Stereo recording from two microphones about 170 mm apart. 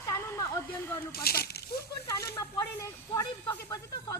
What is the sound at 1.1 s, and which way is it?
Speech, 65° left (ahead or behind).